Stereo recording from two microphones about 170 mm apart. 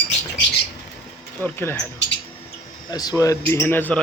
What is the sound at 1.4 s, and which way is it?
Speech, 10° left (ahead or behind).